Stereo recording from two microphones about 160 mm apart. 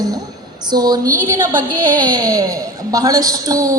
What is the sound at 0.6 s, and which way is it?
Speech, 25° right (ahead or behind).